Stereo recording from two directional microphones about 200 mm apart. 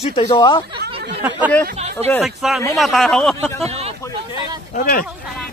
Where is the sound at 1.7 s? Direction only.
35° right (ahead or behind).